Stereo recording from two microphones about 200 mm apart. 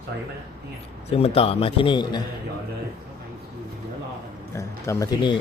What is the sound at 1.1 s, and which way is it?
Speech, 30° left (ahead or behind).